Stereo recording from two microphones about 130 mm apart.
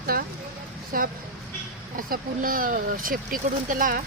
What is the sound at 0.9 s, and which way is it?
Speech, 90° right.